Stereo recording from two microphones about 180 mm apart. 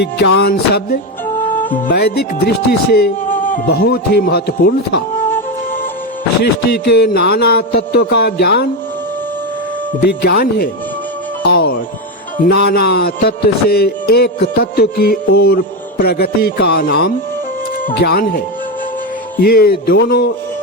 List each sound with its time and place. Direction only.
0.0 s music: 65° left (ahead or behind); by 3.6 s 50° left (ahead or behind)
3.7 s music: 65° left (ahead or behind)
6.4 s music: 65° left (ahead or behind)
10.0 s music: 60° left (ahead or behind)